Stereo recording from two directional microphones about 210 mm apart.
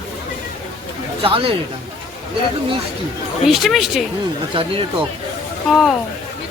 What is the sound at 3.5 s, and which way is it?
Speech, centre (ahead or behind).